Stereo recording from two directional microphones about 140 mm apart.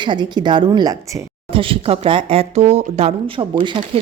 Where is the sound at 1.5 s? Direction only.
40° right (ahead or behind).